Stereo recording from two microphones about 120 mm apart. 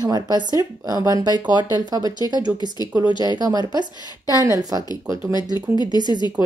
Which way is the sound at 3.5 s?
35° right (ahead or behind).